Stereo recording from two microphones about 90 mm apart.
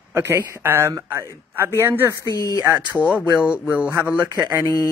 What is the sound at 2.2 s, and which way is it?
Speech, 35° left (ahead or behind).